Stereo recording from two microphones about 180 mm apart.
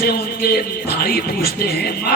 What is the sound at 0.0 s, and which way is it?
Speech, 55° left (ahead or behind).